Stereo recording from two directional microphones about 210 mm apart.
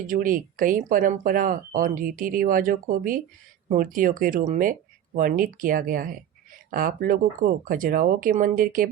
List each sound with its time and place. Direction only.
0.1 s speech: 40° right (ahead or behind)